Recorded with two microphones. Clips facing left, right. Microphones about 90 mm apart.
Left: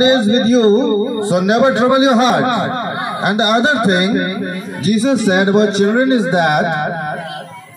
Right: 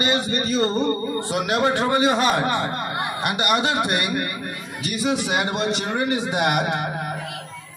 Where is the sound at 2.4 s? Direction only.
90° left.